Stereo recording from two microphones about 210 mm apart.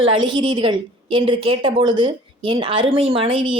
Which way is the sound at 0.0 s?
25° right (ahead or behind).